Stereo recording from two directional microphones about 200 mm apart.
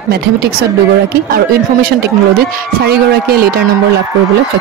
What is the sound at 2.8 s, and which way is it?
Speech, 50° right (ahead or behind).